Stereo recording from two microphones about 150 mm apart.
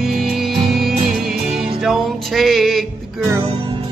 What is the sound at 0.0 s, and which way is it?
Music, centre (ahead or behind).